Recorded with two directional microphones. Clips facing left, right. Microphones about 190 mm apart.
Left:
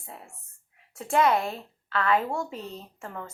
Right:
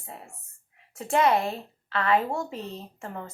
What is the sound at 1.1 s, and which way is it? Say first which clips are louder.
Speech: even; 25° right (ahead or behind).